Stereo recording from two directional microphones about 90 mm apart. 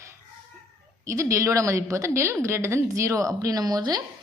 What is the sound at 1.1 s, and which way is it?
Speech, 35° right (ahead or behind).